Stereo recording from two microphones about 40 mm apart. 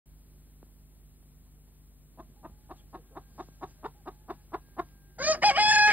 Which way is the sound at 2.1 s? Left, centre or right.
Right.